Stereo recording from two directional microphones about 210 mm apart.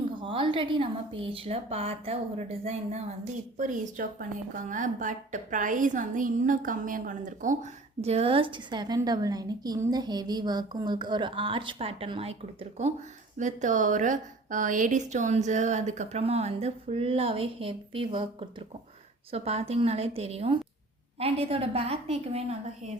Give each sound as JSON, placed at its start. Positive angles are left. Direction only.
{"t": 0.2, "sound": "a woman's voice", "side_deg": -25}